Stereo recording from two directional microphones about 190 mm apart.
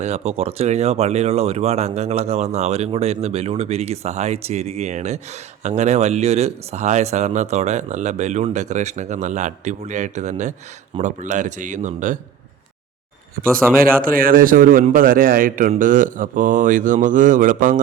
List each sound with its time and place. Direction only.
0.0 s speech: 35° right (ahead or behind)
14.0 s speech: 50° right (ahead or behind)